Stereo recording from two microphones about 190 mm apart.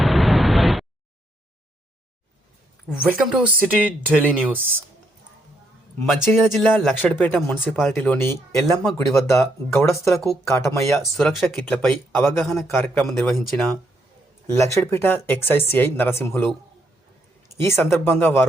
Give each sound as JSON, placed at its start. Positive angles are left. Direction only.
{"t": 0.0, "sound": "vehicle", "side_deg": 0}
{"t": 2.9, "sound": "speech", "side_deg": -5}
{"t": 6.1, "sound": "speech", "side_deg": 0}
{"t": 9.0, "sound": "speech", "side_deg": 15}
{"t": 10.9, "sound": "speech", "side_deg": 0}
{"t": 12.5, "sound": "speech", "side_deg": 0}
{"t": 14.5, "sound": "speech", "side_deg": 15}
{"t": 17.6, "sound": "speech", "side_deg": 15}